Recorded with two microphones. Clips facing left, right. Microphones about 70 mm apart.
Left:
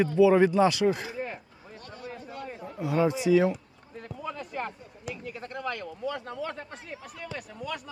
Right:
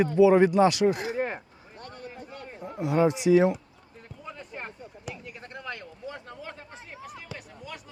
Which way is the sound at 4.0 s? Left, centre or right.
Left.